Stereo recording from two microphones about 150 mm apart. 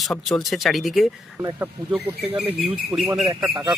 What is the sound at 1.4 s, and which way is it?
Speech, 15° right (ahead or behind).